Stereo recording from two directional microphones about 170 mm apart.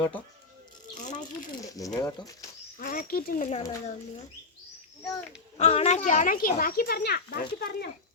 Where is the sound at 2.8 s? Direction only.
55° left (ahead or behind).